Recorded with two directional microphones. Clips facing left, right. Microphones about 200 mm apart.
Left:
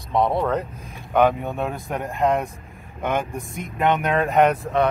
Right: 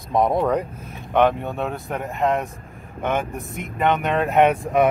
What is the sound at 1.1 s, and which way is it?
Speech, centre (ahead or behind).